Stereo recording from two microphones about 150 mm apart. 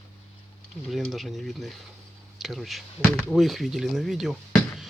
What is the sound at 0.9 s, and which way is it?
Speech, centre (ahead or behind).